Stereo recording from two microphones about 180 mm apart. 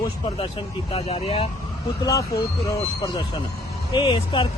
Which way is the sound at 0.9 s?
30° left (ahead or behind).